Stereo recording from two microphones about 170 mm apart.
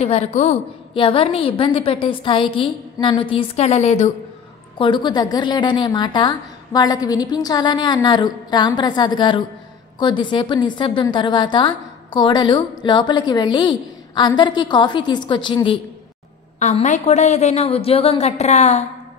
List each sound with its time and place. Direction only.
0.0 s a woman's voice: 40° left (ahead or behind)
0.9 s a woman's voice: 30° left (ahead or behind)
4.7 s a woman's voice: 30° left (ahead or behind)
16.5 s a woman's voice: 45° left (ahead or behind)